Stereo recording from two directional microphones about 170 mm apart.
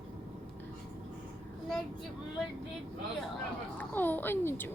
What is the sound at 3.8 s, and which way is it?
Speech, 10° left (ahead or behind).